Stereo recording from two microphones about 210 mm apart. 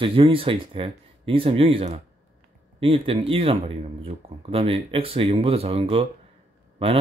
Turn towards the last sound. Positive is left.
turn(degrees=-30)  # may be behind; listen again after turning